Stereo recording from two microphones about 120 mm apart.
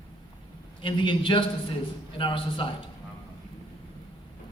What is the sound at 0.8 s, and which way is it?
A man's voice, 45° left (ahead or behind).